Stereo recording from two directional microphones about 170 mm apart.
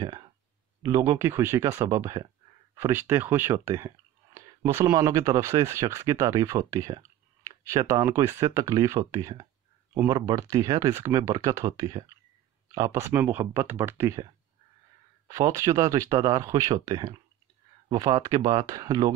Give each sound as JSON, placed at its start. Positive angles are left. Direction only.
{"t": 0.0, "sound": "a sound", "side_deg": -25}
{"t": 0.8, "sound": "speech", "side_deg": -15}
{"t": 15.2, "sound": "speech", "side_deg": -20}